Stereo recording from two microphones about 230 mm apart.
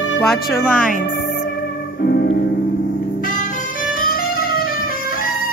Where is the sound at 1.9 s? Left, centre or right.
Left.